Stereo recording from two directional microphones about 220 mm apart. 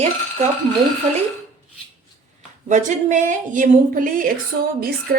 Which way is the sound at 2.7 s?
35° right (ahead or behind).